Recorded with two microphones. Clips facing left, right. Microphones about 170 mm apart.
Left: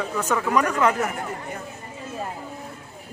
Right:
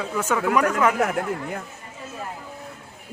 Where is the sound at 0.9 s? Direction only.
70° right (ahead or behind).